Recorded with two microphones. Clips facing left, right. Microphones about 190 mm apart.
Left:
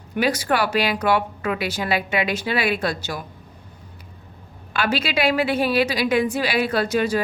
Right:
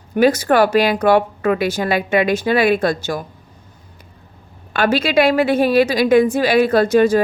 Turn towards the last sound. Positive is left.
turn(degrees=-50)  # may be behind; listen again after turning